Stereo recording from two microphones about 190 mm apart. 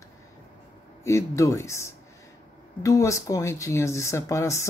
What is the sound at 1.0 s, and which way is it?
Speech, 15° left (ahead or behind).